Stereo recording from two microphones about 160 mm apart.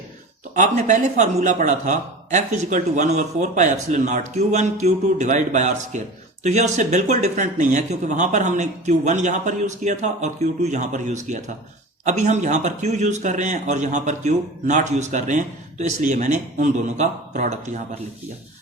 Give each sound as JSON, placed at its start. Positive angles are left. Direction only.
{"t": 0.5, "sound": "a man's voice", "side_deg": -50}